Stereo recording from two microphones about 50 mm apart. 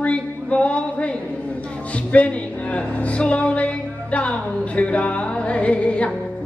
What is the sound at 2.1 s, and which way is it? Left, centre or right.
Speech, left.